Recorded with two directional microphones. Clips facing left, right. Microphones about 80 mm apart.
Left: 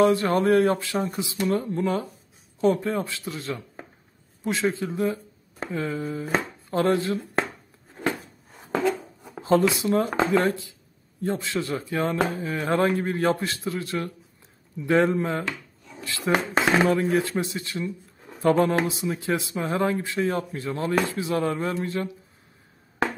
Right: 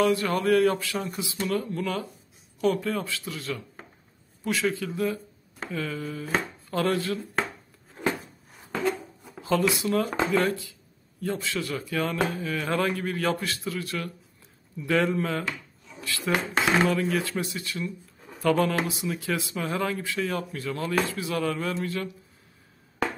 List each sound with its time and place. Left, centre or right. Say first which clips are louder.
0.0 s speech: left 4 dB; left
9.3 s speech: left 4 dB; left